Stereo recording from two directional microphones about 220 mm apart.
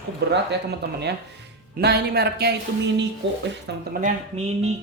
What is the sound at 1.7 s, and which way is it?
Speech, 45° right (ahead or behind).